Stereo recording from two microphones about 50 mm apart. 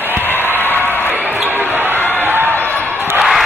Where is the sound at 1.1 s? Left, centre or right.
Right.